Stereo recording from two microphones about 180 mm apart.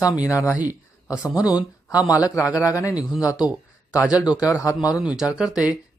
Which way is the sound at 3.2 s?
20° left (ahead or behind).